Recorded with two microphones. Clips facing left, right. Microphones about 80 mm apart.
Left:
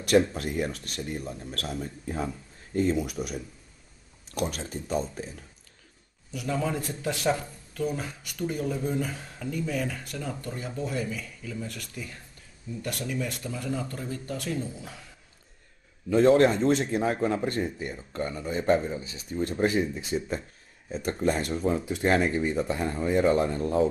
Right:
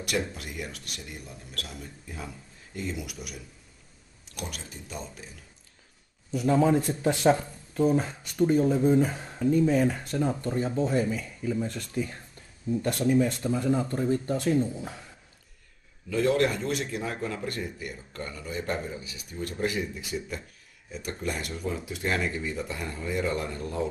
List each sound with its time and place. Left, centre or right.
0.0 s speech: left
6.7 s speech: right
16.1 s speech: left